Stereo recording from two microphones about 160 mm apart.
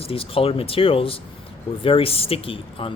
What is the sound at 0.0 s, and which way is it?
Speech, 35° left (ahead or behind).